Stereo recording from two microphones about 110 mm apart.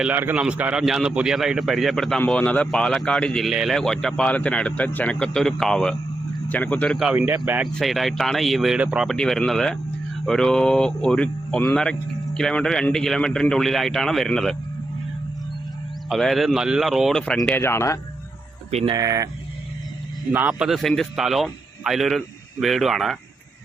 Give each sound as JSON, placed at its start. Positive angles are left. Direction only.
{"t": 0.0, "sound": "speech", "side_deg": -15}
{"t": 7.3, "sound": "speech", "side_deg": -15}
{"t": 7.6, "sound": "speech", "side_deg": 0}
{"t": 9.0, "sound": "speech", "side_deg": 5}
{"t": 16.0, "sound": "speech", "side_deg": 0}
{"t": 17.6, "sound": "speech", "side_deg": 25}
{"t": 18.9, "sound": "speech", "side_deg": -30}
{"t": 20.3, "sound": "speech", "side_deg": -15}
{"t": 20.7, "sound": "speech", "side_deg": 0}